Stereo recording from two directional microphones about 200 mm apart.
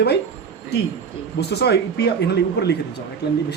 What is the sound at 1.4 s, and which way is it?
A man's voice, 55° left (ahead or behind).